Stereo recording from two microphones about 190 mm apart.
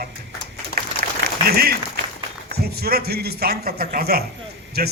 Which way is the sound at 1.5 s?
55° right (ahead or behind).